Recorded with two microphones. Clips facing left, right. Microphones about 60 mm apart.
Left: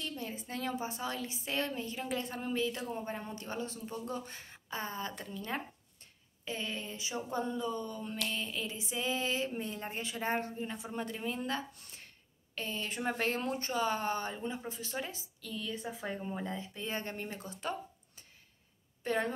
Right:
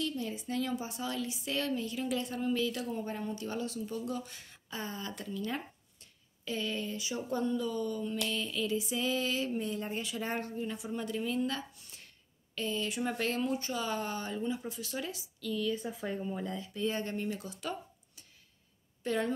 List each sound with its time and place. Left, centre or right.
0.0 s speech: left